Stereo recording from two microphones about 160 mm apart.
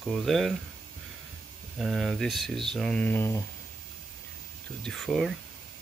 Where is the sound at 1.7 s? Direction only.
Centre (ahead or behind).